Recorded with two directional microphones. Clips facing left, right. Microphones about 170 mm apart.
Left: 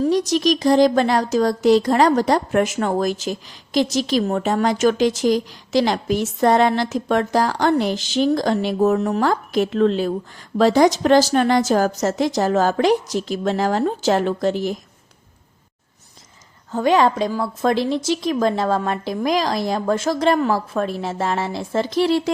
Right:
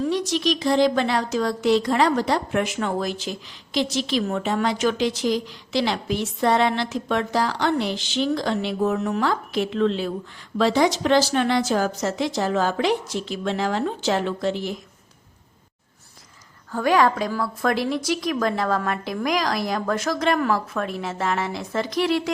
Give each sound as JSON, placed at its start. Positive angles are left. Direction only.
{"t": 0.0, "sound": "speech", "side_deg": 40}
{"t": 16.7, "sound": "a woman's voice", "side_deg": 25}